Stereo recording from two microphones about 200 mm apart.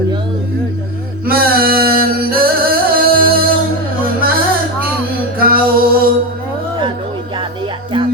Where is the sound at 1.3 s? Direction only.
50° right (ahead or behind).